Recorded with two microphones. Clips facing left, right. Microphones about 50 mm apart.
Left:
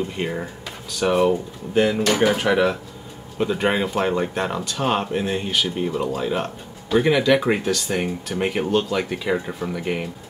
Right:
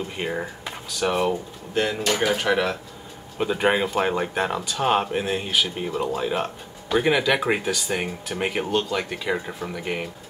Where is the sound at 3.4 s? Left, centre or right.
Centre.